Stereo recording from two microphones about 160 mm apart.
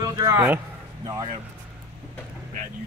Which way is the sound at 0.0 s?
20° right (ahead or behind).